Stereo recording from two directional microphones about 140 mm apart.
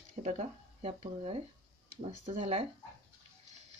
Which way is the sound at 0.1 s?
55° right (ahead or behind).